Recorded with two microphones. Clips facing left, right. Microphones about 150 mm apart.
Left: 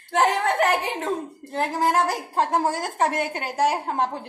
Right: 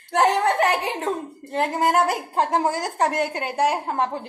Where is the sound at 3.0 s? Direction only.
Centre (ahead or behind).